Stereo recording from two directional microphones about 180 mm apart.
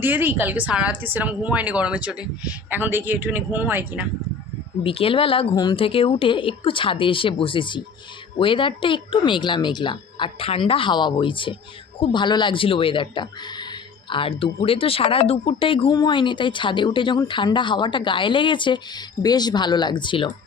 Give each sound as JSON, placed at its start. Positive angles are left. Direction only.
{"t": 0.0, "sound": "a woman's voice", "side_deg": -10}
{"t": 4.8, "sound": "speech", "side_deg": 30}